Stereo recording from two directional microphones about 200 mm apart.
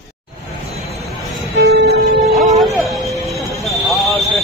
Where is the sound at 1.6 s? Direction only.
55° right (ahead or behind).